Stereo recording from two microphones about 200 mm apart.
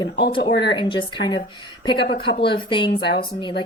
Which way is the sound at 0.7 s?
25° left (ahead or behind).